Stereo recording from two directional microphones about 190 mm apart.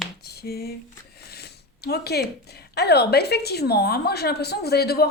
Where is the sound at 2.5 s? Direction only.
60° left (ahead or behind).